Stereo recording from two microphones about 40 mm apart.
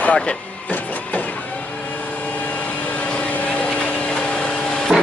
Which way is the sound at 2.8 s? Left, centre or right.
Left.